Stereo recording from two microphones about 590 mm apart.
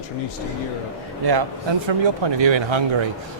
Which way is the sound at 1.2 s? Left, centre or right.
Right.